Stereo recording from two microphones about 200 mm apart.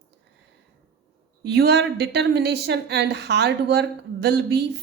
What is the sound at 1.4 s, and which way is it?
Speech, 55° right (ahead or behind).